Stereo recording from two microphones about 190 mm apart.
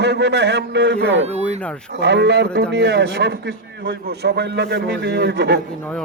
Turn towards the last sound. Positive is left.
turn(degrees=5)  # may be behind; listen again after turning